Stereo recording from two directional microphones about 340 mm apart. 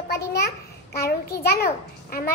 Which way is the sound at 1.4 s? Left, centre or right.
Left.